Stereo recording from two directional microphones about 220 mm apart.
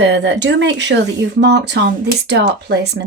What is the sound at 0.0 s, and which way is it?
Speech, 50° right (ahead or behind).